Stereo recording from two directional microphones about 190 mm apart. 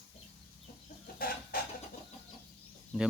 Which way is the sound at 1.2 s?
50° left (ahead or behind).